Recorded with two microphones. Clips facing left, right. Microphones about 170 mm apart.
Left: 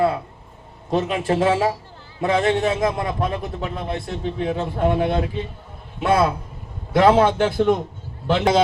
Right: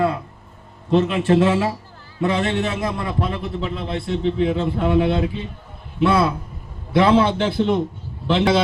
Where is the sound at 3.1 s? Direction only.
45° left (ahead or behind).